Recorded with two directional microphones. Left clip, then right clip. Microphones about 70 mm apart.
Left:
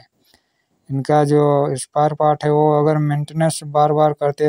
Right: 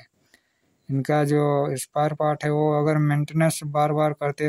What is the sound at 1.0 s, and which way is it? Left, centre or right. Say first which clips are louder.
Speech: left 7 dB; left.